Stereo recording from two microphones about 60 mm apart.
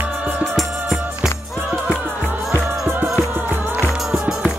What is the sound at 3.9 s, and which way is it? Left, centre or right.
Music, centre.